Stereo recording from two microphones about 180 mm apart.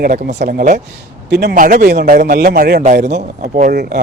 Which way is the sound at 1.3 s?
65° right (ahead or behind).